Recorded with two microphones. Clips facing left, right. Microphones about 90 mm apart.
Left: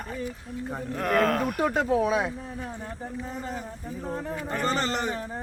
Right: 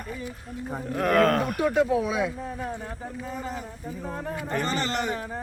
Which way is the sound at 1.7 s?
40° left (ahead or behind).